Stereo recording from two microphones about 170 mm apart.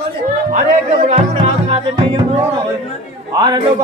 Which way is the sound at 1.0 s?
40° right (ahead or behind).